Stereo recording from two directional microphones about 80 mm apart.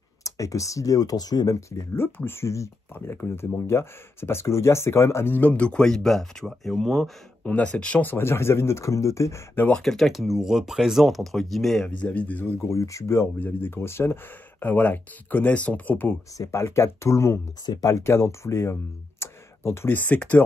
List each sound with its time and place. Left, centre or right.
0.2 s speech: left
1.7 s speech: left; by 7.1 s centre
7.4 s speech: centre; by 9.4 s left
9.8 s speech: centre
11.9 s speech: centre
12.6 s speech: left
13.4 s speech: left
16.3 s speech: left